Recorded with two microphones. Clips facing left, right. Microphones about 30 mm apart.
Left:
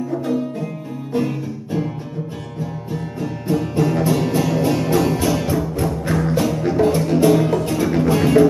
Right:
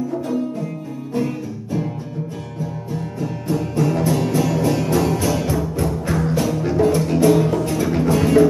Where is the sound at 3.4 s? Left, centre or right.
Left.